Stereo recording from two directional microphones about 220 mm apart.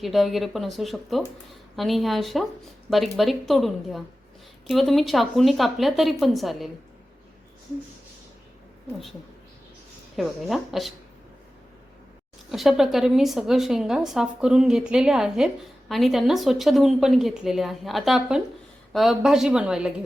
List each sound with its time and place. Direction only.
0.0 s a woman's voice: centre (ahead or behind)
10.2 s a woman's voice: centre (ahead or behind)
12.5 s a woman's voice: centre (ahead or behind)